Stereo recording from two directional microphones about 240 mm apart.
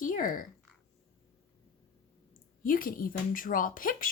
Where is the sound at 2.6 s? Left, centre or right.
Left.